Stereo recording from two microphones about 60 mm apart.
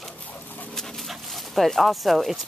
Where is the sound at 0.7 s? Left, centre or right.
Centre.